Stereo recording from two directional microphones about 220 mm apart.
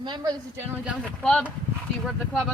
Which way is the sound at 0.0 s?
20° right (ahead or behind).